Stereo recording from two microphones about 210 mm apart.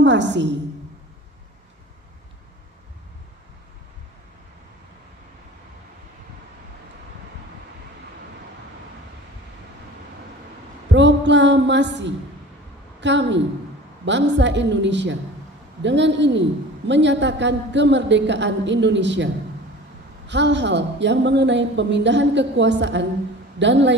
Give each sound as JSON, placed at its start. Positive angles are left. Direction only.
{"t": 0.0, "sound": "a woman's voice", "side_deg": -55}
{"t": 10.9, "sound": "a sound", "side_deg": -60}
{"t": 13.0, "sound": "a woman's voice", "side_deg": -60}